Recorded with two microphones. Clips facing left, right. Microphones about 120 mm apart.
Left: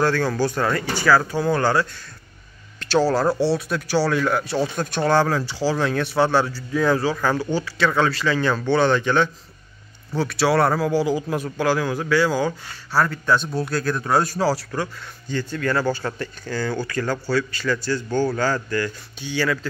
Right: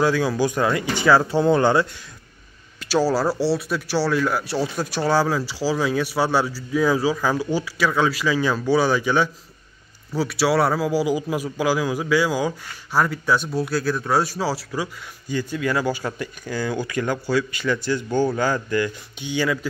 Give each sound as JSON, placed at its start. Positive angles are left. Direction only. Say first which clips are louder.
{"t": 0.0, "sound": "a man's voice", "louder": "right 1 dB", "side_deg": -10}
{"t": 2.8, "sound": "a man's voice", "louder": "left 1 dB", "side_deg": -5}